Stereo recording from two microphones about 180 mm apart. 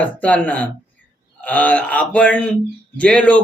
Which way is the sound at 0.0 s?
10° left (ahead or behind).